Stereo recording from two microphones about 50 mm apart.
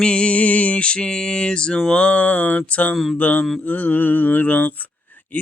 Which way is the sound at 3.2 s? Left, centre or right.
Left.